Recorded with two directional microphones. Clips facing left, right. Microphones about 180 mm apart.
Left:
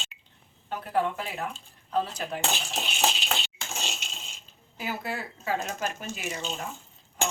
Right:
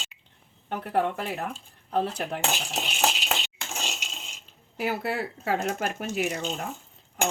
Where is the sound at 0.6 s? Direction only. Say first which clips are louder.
Right 2 dB; 60° right (ahead or behind).